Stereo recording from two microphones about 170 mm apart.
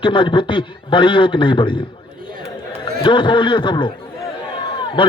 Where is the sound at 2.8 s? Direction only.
25° left (ahead or behind).